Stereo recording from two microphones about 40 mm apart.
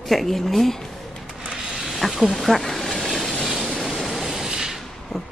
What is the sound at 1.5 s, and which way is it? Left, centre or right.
Mechanisms, centre.